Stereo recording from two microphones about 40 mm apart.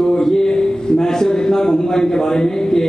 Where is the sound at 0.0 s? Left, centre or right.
Centre.